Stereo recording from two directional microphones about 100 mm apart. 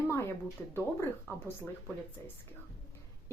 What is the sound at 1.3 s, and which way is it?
Speech, 30° left (ahead or behind).